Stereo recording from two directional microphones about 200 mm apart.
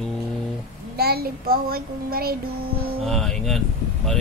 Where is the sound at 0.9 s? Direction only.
50° right (ahead or behind).